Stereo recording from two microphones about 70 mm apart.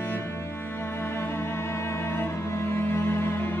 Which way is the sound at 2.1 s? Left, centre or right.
Left.